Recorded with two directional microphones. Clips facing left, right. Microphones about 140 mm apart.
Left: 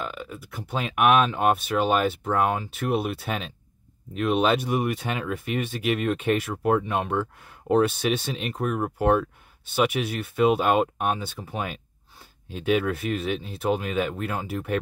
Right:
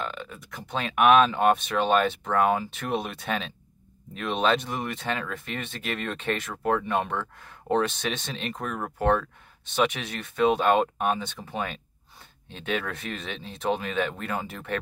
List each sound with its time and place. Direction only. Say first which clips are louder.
0.0 s speech: left 1 dB; 5° left (ahead or behind)